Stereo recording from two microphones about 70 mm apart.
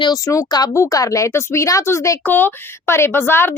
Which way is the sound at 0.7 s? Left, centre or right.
Left.